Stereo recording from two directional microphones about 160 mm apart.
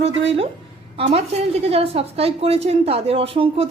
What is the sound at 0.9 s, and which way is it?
A woman's voice, 40° right (ahead or behind).